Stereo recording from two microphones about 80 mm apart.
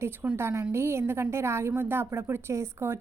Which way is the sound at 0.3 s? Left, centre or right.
Right.